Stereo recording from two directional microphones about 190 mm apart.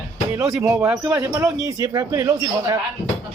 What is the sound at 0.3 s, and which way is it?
A man's voice, 10° right (ahead or behind).